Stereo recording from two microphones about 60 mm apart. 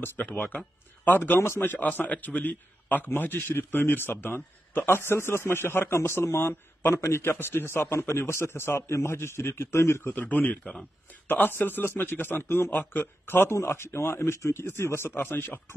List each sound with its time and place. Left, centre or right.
0.0 s a man's voice: left
10.1 s speech: left
10.6 s speech: centre
11.2 s a man's voice: left